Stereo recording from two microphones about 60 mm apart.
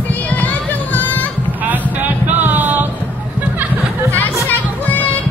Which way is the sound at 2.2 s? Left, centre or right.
Right.